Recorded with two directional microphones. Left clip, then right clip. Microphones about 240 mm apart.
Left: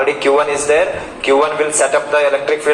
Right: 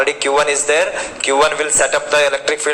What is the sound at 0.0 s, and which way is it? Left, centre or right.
A man's voice, right.